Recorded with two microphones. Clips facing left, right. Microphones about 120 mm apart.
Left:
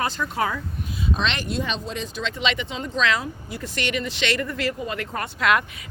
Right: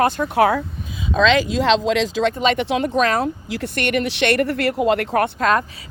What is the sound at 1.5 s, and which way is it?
Speech, 90° right.